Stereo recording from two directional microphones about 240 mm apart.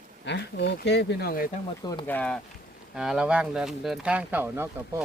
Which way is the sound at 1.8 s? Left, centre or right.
Centre.